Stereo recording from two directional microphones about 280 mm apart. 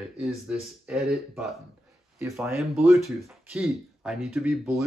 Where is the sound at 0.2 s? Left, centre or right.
Centre.